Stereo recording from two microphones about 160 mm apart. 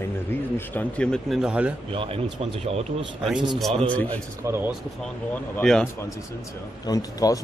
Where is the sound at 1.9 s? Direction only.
35° right (ahead or behind).